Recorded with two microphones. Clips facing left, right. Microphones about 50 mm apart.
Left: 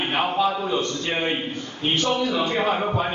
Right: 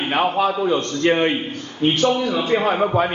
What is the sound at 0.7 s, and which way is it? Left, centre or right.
Speech, right.